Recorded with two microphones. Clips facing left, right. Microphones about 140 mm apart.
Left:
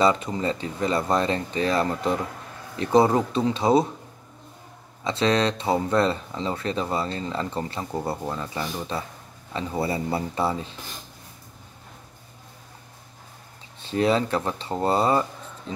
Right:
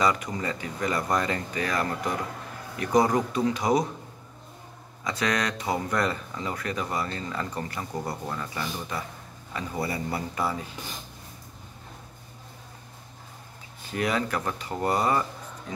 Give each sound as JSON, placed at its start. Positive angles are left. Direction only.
{"t": 0.0, "sound": "speech", "side_deg": 25}
{"t": 5.0, "sound": "speech", "side_deg": 30}
{"t": 13.7, "sound": "speech", "side_deg": 25}